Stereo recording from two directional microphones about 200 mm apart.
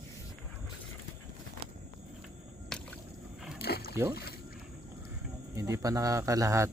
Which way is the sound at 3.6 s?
50° left (ahead or behind).